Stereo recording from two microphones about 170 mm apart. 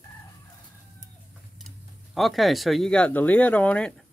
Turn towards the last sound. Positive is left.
turn(degrees=5)  # may be behind; listen again after turning